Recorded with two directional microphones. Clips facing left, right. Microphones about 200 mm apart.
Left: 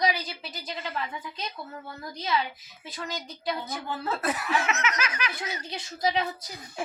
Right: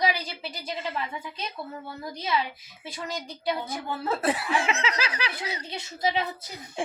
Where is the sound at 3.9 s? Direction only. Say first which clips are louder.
Right 3 dB; 30° right (ahead or behind).